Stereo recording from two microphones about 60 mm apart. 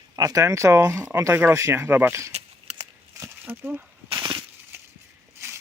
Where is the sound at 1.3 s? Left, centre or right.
Right.